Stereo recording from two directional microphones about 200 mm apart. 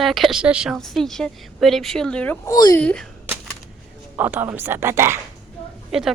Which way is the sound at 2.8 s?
5° left (ahead or behind).